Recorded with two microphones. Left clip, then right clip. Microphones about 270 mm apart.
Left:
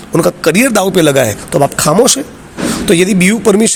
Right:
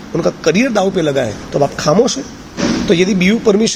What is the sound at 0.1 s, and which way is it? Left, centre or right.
Speech, left.